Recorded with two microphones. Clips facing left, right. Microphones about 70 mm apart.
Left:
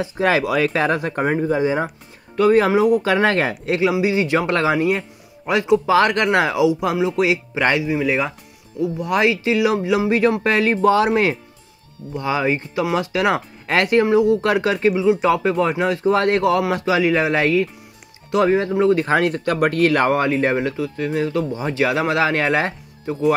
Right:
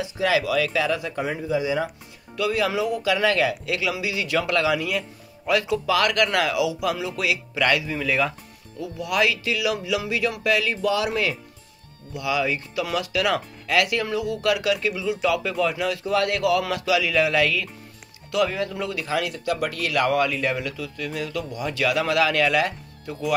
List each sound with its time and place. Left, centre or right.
0.0 s speech: left